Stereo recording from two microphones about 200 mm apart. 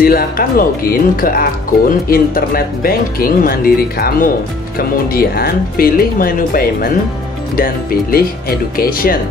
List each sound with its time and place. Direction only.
0.0 s speech: 50° left (ahead or behind)